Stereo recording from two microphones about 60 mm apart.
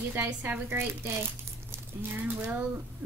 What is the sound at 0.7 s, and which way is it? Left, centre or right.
Speech, right.